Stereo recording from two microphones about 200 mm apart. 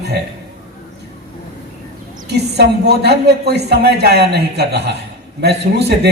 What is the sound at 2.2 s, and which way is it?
A man's voice, 55° right (ahead or behind).